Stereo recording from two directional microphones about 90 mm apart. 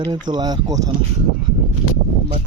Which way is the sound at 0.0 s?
50° right (ahead or behind).